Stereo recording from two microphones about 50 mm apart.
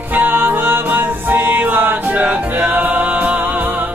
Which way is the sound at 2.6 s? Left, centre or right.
Right.